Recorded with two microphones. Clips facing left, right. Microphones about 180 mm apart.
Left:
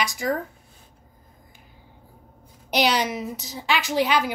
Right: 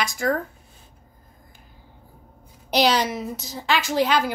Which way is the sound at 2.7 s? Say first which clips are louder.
Right 2 dB; 15° left (ahead or behind).